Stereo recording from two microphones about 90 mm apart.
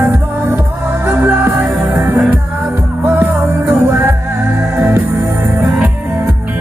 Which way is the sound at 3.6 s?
25° right (ahead or behind).